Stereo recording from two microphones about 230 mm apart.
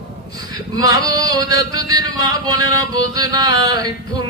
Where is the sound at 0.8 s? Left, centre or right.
Centre.